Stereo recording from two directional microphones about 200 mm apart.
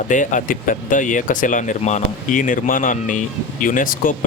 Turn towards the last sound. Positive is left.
turn(degrees=45)  # may be behind; listen again after turning